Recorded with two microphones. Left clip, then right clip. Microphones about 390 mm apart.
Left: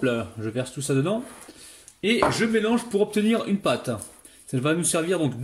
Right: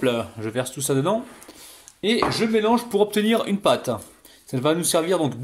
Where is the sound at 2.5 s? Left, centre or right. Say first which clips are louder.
Right 4 dB; right.